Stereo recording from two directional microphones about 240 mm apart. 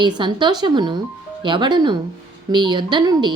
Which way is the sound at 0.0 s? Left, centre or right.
Centre.